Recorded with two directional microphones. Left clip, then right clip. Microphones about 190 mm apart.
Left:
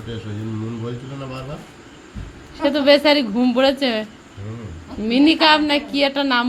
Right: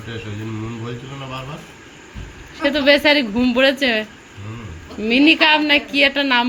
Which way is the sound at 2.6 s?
Centre (ahead or behind).